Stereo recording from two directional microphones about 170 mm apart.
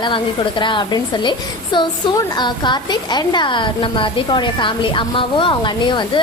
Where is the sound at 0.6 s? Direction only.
30° left (ahead or behind).